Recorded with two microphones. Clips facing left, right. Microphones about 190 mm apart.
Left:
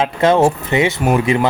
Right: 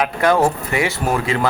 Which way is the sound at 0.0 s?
25° left (ahead or behind).